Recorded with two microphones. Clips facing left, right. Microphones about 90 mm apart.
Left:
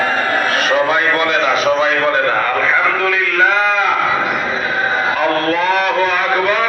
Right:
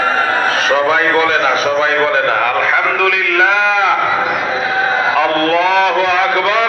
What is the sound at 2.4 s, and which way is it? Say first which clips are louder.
A man's voice: right 1 dB; 85° right.